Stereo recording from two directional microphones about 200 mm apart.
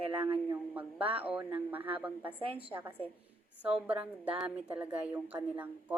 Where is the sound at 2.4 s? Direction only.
25° right (ahead or behind).